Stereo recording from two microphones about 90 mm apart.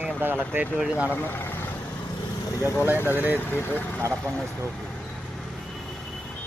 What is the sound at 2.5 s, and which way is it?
Speech, 35° left (ahead or behind).